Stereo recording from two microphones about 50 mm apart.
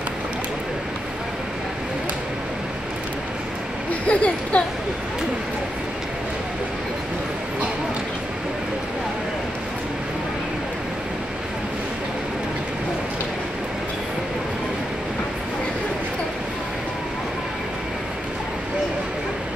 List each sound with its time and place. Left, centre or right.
4.1 s speech: left